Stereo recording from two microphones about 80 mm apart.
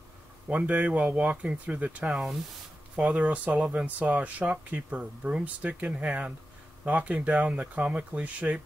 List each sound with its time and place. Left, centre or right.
0.5 s speech: centre
2.0 s speech: centre
3.0 s speech: centre